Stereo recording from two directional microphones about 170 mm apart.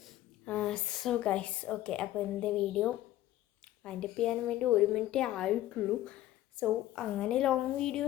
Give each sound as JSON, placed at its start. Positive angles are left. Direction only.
{"t": 0.0, "sound": "a woman's voice", "side_deg": 5}